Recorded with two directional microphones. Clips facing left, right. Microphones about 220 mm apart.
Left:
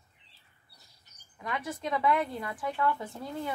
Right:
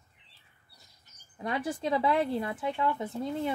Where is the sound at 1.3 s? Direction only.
30° right (ahead or behind).